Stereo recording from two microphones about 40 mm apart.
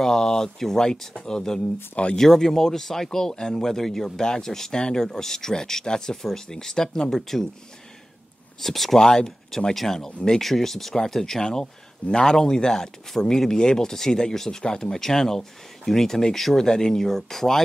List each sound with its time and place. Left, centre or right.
0.0 s speech: centre
8.5 s speech: centre
16.6 s speech: centre